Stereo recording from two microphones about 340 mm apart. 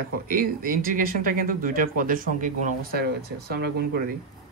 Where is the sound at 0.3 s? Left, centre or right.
Right.